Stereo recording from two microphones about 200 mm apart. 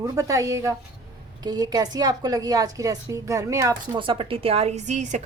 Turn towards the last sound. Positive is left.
turn(degrees=-35)  # may be behind; listen again after turning